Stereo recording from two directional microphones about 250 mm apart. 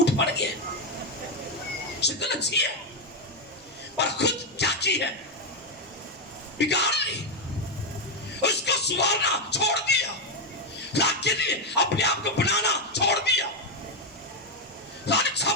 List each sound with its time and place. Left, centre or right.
0.2 s a sound: left
2.0 s speech: left
3.9 s a sound: left
6.6 s speech: left
8.4 s speech: left
15.0 s dog: left